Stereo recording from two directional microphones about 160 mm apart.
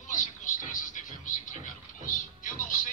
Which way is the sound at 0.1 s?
55° left (ahead or behind).